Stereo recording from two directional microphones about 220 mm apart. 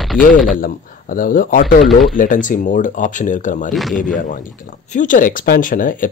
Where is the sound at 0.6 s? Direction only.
40° left (ahead or behind).